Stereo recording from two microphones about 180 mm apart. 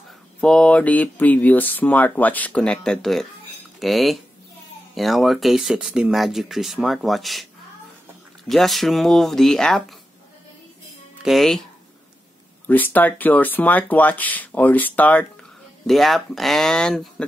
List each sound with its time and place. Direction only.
0.4 s speech: 5° left (ahead or behind)
8.5 s speech: centre (ahead or behind)
11.2 s speech: centre (ahead or behind)
12.6 s speech: 10° left (ahead or behind)